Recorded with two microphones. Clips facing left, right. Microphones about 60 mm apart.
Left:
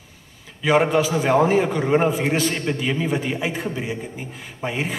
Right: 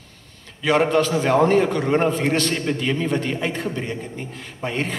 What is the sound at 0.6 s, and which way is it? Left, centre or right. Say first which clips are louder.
A man's voice: even; centre.